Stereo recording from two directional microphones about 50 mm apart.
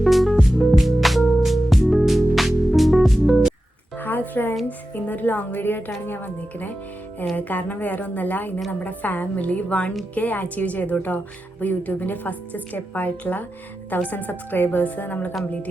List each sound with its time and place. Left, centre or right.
0.0 s music: centre
3.2 s music: centre
3.9 s music: left
4.9 s a woman's voice: left